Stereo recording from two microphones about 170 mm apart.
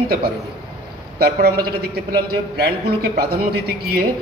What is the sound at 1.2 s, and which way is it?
A man's voice, 65° right (ahead or behind).